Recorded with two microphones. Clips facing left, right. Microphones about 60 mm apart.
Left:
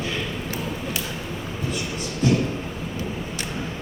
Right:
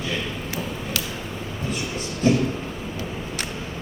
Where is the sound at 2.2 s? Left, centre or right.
Right.